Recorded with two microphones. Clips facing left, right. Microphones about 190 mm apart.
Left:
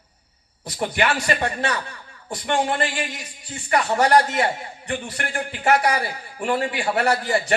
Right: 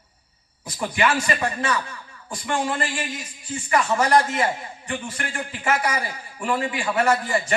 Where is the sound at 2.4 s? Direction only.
65° left (ahead or behind).